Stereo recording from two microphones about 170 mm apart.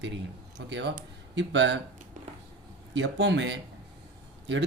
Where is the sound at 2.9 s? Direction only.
90° right.